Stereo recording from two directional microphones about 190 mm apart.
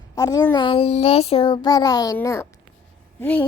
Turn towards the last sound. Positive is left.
turn(degrees=10)  # may be behind; listen again after turning